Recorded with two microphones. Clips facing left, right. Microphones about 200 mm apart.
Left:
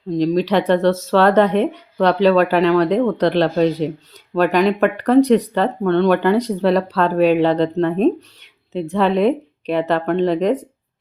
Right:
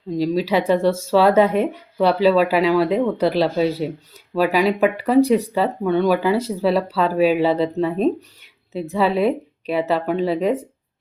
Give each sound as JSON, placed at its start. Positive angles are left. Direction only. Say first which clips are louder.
{"t": 0.1, "sound": "a woman's voice", "louder": "left 3 dB", "side_deg": -5}